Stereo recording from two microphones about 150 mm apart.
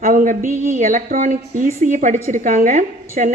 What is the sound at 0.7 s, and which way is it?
A woman's voice, 60° right (ahead or behind).